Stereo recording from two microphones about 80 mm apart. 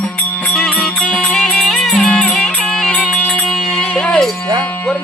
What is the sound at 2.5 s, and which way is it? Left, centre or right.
Music, centre.